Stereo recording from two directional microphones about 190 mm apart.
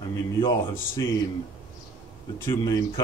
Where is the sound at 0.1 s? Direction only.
20° left (ahead or behind).